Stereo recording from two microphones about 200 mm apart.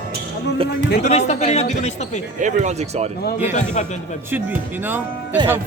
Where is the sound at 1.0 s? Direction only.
35° left (ahead or behind).